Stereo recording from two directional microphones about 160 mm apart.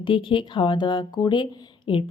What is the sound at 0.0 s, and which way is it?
Speech, 30° left (ahead or behind).